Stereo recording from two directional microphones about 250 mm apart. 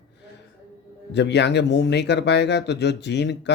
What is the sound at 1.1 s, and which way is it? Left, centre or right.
Speech, left.